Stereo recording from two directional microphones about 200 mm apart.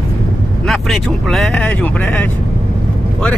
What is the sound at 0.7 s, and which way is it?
Speech, centre (ahead or behind).